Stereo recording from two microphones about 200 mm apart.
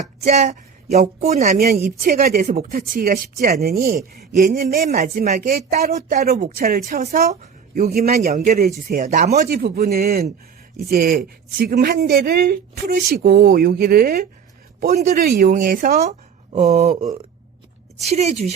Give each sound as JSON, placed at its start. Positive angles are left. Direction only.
{"t": 0.2, "sound": "speech", "side_deg": -35}
{"t": 1.5, "sound": "a woman's voice", "side_deg": -50}
{"t": 5.1, "sound": "speech", "side_deg": -35}
{"t": 5.5, "sound": "a woman's voice", "side_deg": -50}
{"t": 8.9, "sound": "speech", "side_deg": -40}
{"t": 9.5, "sound": "a woman's voice", "side_deg": -50}
{"t": 14.8, "sound": "speech", "side_deg": -35}
{"t": 15.1, "sound": "speech", "side_deg": -50}